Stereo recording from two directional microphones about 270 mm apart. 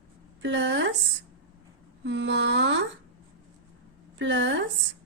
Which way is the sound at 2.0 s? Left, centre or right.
Right.